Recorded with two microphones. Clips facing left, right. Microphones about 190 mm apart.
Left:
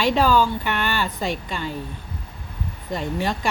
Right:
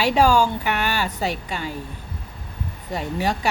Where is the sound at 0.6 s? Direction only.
10° right (ahead or behind).